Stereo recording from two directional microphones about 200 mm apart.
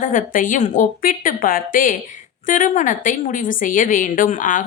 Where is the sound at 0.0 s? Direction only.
40° left (ahead or behind).